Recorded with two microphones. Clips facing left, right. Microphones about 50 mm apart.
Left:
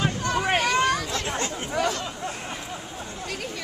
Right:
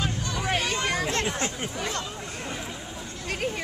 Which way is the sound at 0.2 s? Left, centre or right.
Left.